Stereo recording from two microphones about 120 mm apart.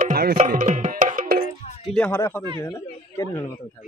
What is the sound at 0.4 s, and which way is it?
Tabla, 90° right.